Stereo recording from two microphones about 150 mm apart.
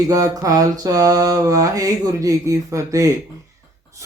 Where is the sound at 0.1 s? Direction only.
25° right (ahead or behind).